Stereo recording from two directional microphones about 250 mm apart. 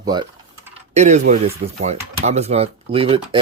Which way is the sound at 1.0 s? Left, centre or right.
Right.